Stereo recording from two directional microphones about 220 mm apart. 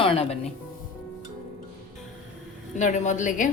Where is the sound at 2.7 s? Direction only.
35° left (ahead or behind).